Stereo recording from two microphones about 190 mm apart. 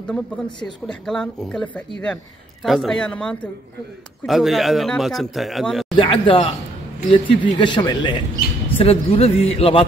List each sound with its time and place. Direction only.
0.8 s speech: centre (ahead or behind)
5.9 s a man's voice: 25° left (ahead or behind)